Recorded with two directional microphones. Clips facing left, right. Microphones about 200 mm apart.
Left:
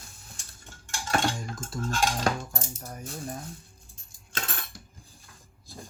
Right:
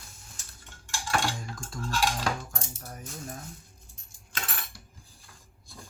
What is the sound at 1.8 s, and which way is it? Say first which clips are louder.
Cutlery: left 2 dB; 40° left (ahead or behind).